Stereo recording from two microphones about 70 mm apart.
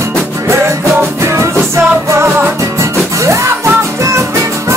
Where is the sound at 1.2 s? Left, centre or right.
Right.